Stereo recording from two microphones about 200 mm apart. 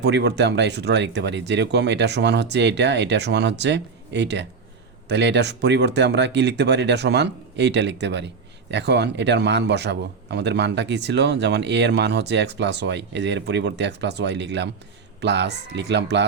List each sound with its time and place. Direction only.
0.0 s a man's voice: 55° right (ahead or behind)